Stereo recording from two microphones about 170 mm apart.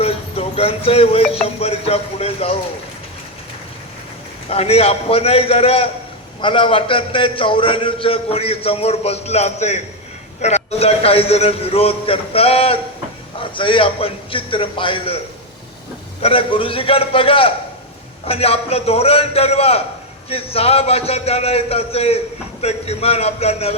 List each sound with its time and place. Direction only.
0.0 s music: 35° left (ahead or behind)
4.4 s a man's voice: 35° left (ahead or behind)
16.2 s a man's voice: 35° left (ahead or behind)